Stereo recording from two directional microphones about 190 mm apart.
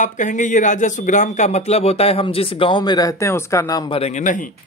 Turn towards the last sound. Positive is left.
turn(degrees=40)  # may be behind; listen again after turning